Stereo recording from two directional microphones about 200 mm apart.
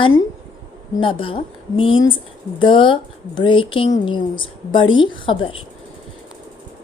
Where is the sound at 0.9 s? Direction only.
25° left (ahead or behind).